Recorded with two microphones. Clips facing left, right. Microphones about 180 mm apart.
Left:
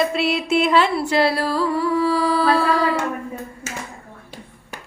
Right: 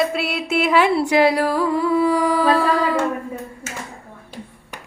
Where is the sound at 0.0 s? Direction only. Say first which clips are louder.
Left 1 dB; centre (ahead or behind).